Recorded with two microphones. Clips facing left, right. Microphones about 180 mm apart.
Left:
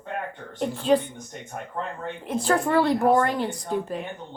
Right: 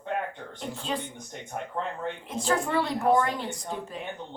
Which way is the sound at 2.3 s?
55° left (ahead or behind).